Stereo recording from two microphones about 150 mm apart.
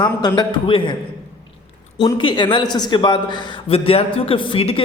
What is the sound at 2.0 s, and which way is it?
A man's voice, 30° left (ahead or behind).